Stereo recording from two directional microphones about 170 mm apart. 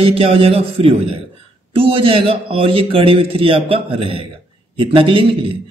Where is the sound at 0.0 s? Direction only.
35° right (ahead or behind).